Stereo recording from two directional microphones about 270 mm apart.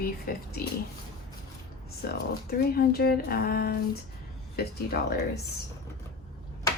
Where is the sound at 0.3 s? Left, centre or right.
Left.